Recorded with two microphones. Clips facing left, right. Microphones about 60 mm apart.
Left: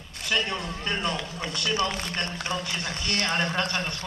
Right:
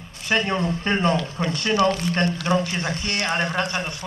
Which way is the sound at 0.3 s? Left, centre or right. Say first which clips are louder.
Right 6 dB; right.